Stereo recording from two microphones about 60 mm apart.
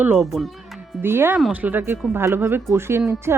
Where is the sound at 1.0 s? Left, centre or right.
Right.